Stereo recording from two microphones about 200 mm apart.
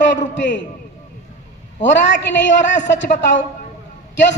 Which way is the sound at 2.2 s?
60° left (ahead or behind).